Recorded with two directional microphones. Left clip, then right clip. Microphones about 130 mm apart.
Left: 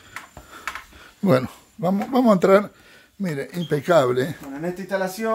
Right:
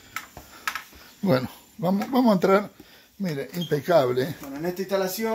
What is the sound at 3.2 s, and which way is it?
Speech, 20° left (ahead or behind).